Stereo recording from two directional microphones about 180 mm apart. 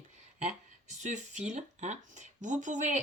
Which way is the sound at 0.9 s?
40° right (ahead or behind).